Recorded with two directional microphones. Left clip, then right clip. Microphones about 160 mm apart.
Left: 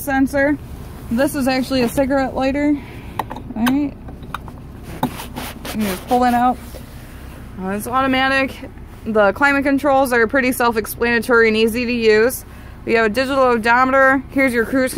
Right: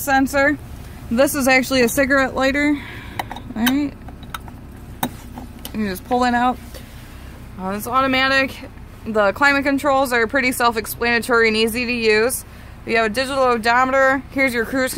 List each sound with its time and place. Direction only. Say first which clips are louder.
0.0 s speech: right 1 dB; 10° right (ahead or behind)
1.1 s speech: right 3 dB; 25° right (ahead or behind)
6.1 s speech: left 2 dB; 25° right (ahead or behind)
7.6 s speech: even; centre (ahead or behind)